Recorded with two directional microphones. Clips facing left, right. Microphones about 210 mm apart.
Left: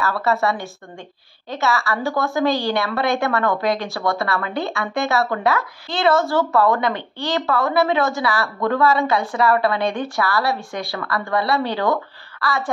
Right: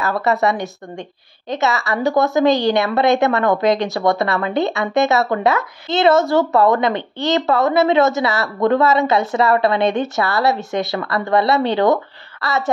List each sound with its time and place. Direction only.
0.0 s a woman's voice: 20° right (ahead or behind)